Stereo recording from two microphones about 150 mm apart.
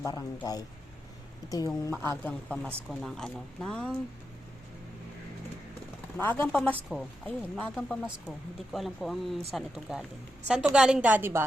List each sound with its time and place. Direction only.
0.0 s speech: 25° left (ahead or behind)
2.0 s speech: 10° left (ahead or behind)
6.1 s speech: 15° left (ahead or behind)
6.9 s speech: 5° right (ahead or behind)
7.3 s a woman's voice: 10° left (ahead or behind); by 11.4 s 15° right (ahead or behind)